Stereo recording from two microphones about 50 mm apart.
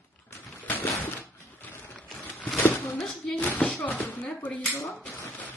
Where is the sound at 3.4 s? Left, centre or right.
Left.